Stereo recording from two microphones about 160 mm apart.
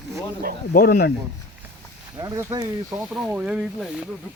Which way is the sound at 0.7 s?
70° left (ahead or behind).